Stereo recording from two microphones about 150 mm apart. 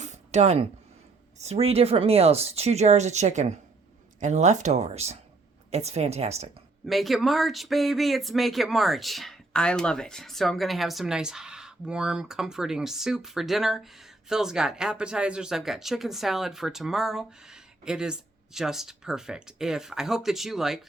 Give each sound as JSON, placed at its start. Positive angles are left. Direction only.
{"t": 0.0, "sound": "a sound", "side_deg": -50}
{"t": 1.4, "sound": "speech", "side_deg": -45}
{"t": 6.8, "sound": "speech", "side_deg": 0}